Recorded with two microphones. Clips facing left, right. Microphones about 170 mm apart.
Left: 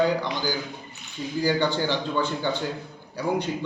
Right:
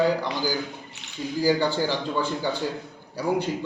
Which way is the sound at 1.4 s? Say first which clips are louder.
Right 1 dB; 5° right (ahead or behind).